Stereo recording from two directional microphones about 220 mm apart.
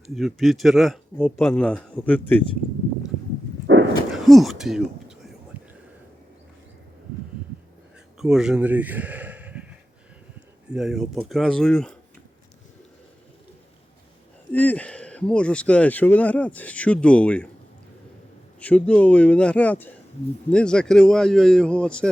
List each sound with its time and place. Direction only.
0.1 s speech: centre (ahead or behind)
3.7 s a sound: 55° right (ahead or behind)
4.1 s speech: centre (ahead or behind)
5.5 s a sound: 5° right (ahead or behind)
8.2 s speech: centre (ahead or behind)
10.7 s speech: centre (ahead or behind)
14.5 s speech: 5° left (ahead or behind)
18.6 s speech: 5° left (ahead or behind)